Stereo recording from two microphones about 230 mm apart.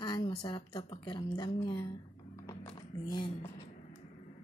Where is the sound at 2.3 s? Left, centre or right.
Centre.